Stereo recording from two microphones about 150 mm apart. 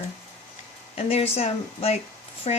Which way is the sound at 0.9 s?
40° left (ahead or behind).